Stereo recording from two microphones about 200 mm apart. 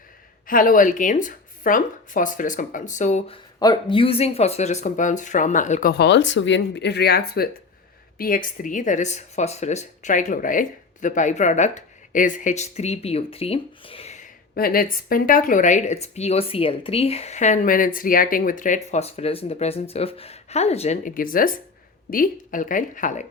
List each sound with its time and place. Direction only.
0.4 s speech: 45° left (ahead or behind)
3.6 s speech: 20° left (ahead or behind); by 5.9 s 40° left (ahead or behind)
5.9 s speech: 60° left (ahead or behind); by 14.3 s 30° left (ahead or behind)
14.5 s speech: 45° left (ahead or behind)